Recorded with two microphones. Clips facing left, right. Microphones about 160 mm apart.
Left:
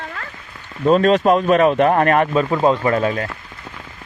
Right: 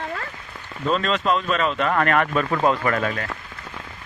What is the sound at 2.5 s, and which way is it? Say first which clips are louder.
Speech: left 3 dB; 20° left (ahead or behind).